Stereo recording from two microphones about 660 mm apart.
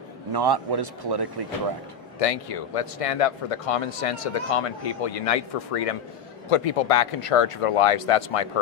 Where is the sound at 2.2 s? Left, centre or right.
Left.